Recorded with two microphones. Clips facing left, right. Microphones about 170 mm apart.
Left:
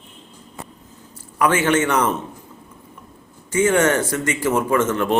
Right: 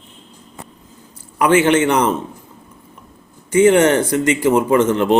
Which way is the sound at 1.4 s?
20° right (ahead or behind).